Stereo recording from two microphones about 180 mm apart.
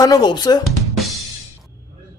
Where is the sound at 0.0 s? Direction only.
20° left (ahead or behind).